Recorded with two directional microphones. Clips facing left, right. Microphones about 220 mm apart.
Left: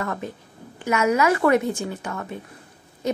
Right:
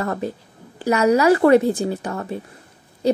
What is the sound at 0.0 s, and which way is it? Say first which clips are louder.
A woman's voice: right 5 dB; 35° right (ahead or behind).